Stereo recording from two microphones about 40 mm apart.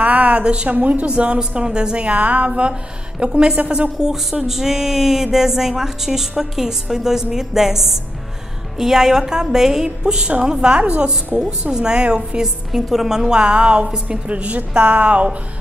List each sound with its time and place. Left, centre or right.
0.0 s a sound: right
0.7 s a woman's voice: right
2.1 s a woman's voice: right; by 3.5 s centre
3.5 s speech: right
4.0 s speech: centre
10.8 s speech: right
11.3 s a woman's voice: right
14.2 s speech: right